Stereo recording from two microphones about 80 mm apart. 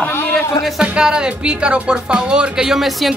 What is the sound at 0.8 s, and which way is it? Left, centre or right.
Speech, centre.